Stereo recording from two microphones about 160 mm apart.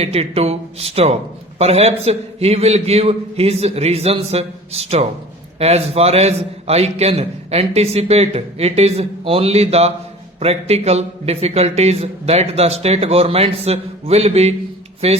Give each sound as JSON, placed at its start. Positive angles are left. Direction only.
{"t": 0.0, "sound": "a man's voice", "side_deg": -40}